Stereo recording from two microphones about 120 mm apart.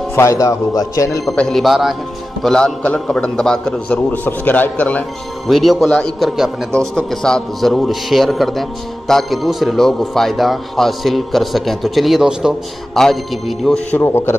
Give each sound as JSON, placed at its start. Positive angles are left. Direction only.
{"t": 0.1, "sound": "speech", "side_deg": 25}
{"t": 1.2, "sound": "a man's voice", "side_deg": 5}
{"t": 5.5, "sound": "a man's voice", "side_deg": 0}
{"t": 13.9, "sound": "speech", "side_deg": 20}